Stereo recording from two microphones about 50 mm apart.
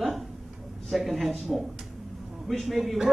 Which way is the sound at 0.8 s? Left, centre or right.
Centre.